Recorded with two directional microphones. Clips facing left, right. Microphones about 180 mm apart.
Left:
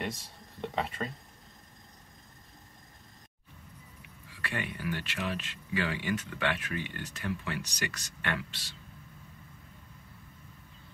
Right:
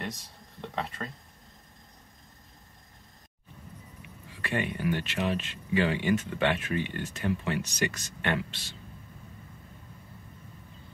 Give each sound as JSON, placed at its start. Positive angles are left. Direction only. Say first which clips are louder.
{"t": 0.6, "sound": "speech", "louder": "left 2 dB", "side_deg": 5}
{"t": 4.4, "sound": "speech", "louder": "right 6 dB", "side_deg": -25}